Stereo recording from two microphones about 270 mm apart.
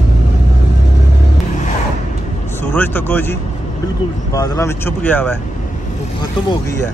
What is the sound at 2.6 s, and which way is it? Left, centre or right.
Speech, centre.